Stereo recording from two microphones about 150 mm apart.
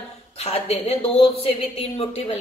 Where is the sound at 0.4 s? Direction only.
45° left (ahead or behind).